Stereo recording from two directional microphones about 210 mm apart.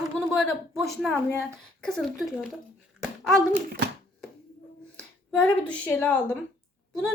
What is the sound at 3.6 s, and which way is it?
Speech, 50° right (ahead or behind).